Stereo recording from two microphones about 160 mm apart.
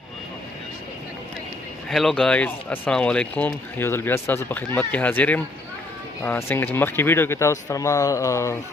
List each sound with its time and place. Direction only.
1.9 s speech: centre (ahead or behind); by 8.5 s 20° left (ahead or behind)